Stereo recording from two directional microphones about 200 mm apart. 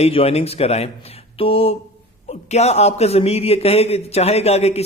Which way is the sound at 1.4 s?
30° left (ahead or behind).